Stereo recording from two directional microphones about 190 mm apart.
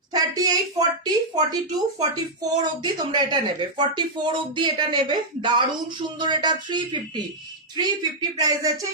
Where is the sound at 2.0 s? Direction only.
20° right (ahead or behind).